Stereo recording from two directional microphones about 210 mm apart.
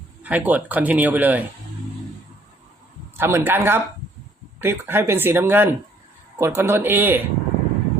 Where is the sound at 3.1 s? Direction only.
10° right (ahead or behind).